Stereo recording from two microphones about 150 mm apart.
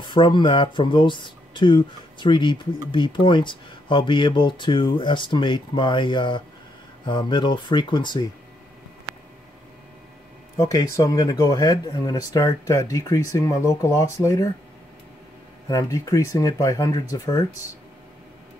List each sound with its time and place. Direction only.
0.0 s speech: 30° left (ahead or behind)
10.6 s speech: 25° left (ahead or behind)
15.7 s speech: 20° left (ahead or behind)